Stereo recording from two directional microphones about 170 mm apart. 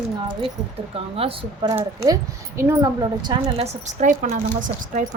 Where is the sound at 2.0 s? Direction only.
15° right (ahead or behind).